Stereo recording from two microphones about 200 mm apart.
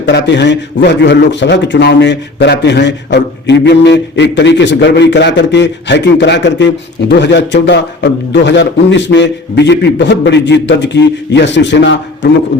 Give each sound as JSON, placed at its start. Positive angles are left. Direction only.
{"t": 0.0, "sound": "a man's voice", "side_deg": 60}